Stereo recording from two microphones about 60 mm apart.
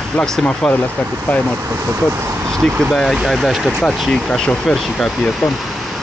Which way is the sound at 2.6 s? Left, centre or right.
Centre.